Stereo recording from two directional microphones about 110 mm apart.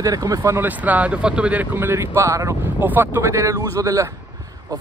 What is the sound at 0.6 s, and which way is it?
Speech, 15° right (ahead or behind).